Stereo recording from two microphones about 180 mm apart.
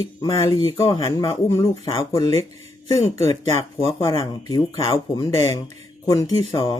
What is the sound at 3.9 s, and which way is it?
Speech, 15° left (ahead or behind).